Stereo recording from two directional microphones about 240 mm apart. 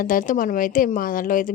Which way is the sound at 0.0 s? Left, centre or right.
Left.